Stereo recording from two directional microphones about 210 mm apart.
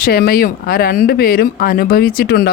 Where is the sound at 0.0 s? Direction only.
50° left (ahead or behind).